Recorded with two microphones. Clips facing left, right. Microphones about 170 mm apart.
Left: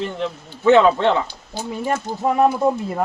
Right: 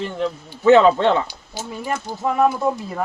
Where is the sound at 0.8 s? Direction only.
15° right (ahead or behind).